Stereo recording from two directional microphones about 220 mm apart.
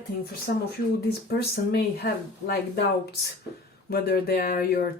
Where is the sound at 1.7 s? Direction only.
45° left (ahead or behind).